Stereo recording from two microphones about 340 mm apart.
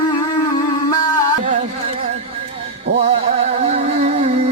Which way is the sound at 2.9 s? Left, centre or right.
Centre.